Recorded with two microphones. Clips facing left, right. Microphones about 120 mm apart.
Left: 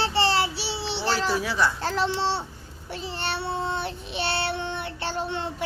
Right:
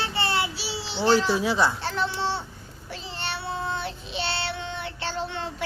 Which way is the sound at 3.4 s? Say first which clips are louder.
Even; 25° left (ahead or behind).